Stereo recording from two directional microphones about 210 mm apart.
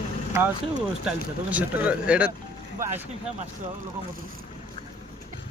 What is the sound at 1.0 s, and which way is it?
Speech, 5° right (ahead or behind).